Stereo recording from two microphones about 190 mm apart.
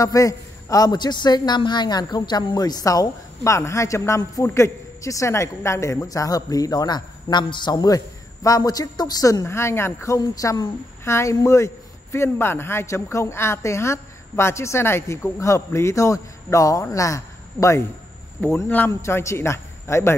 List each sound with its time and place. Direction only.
0.0 s a woman's voice: 15° left (ahead or behind)